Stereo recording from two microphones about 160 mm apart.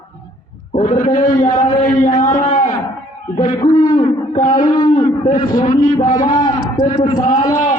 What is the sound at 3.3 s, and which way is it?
Speech, 25° left (ahead or behind).